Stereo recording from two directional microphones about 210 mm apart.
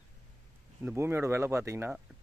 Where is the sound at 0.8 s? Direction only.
10° right (ahead or behind).